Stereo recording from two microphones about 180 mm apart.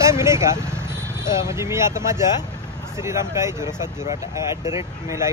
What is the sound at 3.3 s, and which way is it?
Speech, 15° right (ahead or behind).